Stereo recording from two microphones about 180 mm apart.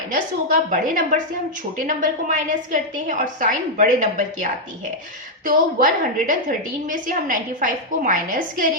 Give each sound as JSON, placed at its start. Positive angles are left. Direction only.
{"t": 0.1, "sound": "a woman's voice", "side_deg": -45}
{"t": 5.5, "sound": "a woman's voice", "side_deg": -50}